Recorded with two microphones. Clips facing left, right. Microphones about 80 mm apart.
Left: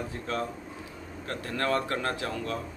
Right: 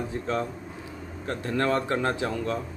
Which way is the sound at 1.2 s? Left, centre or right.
Right.